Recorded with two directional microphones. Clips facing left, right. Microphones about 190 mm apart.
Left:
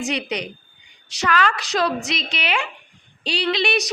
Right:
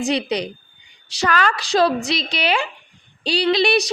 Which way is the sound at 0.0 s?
35° right (ahead or behind).